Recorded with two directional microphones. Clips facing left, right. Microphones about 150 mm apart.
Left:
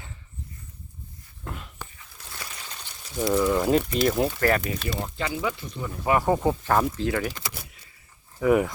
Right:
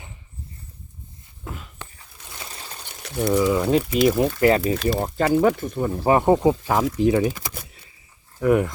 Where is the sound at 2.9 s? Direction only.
70° right (ahead or behind).